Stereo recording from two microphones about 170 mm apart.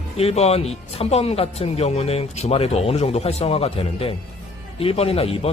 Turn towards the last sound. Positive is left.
turn(degrees=35)  # may be behind; listen again after turning